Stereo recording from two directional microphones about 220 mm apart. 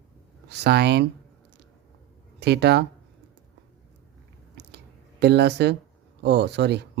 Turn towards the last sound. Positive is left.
turn(degrees=-50)  # may be behind; listen again after turning